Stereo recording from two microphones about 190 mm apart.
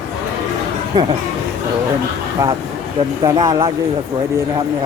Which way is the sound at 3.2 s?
20° right (ahead or behind).